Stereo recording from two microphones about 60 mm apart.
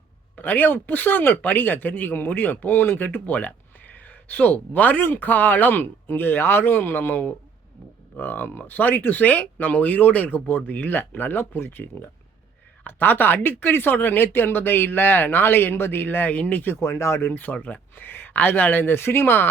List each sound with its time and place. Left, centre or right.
0.3 s speech: left
16.8 s speech: left
17.3 s speech: left
17.9 s speech: left